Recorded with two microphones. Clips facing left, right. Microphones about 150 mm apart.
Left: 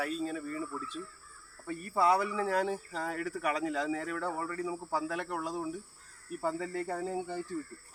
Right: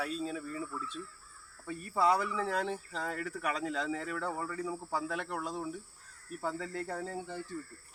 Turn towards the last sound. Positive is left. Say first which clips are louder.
# left 4 dB
turn(degrees=10)  # may be behind; listen again after turning